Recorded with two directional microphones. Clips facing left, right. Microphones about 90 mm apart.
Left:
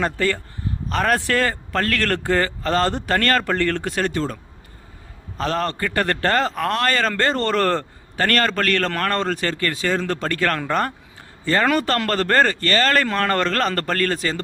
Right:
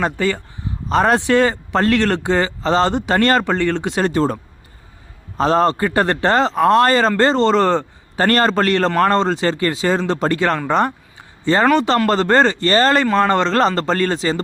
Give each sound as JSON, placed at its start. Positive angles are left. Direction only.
{"t": 0.0, "sound": "speech", "side_deg": -15}
{"t": 0.9, "sound": "speech", "side_deg": -30}
{"t": 4.0, "sound": "a man's voice", "side_deg": -35}
{"t": 5.4, "sound": "a man's voice", "side_deg": -30}
{"t": 8.1, "sound": "speech", "side_deg": -30}
{"t": 13.0, "sound": "speech", "side_deg": -15}